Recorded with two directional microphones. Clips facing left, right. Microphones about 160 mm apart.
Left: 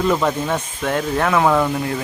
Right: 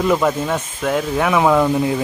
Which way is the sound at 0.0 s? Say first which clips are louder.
Right 2 dB; centre (ahead or behind).